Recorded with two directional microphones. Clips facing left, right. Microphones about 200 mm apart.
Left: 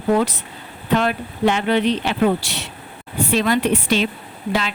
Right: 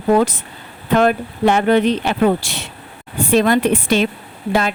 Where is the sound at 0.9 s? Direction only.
50° right (ahead or behind).